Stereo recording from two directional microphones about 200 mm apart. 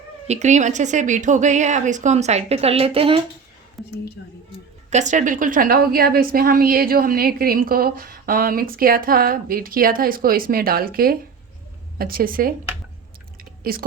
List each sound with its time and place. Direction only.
0.3 s a woman's voice: 35° right (ahead or behind)
3.8 s whispering: centre (ahead or behind)
4.9 s a woman's voice: 35° right (ahead or behind)